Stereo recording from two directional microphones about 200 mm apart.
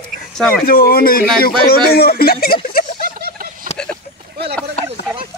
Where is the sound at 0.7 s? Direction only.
50° left (ahead or behind).